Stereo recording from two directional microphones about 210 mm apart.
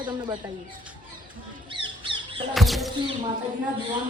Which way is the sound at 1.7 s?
25° right (ahead or behind).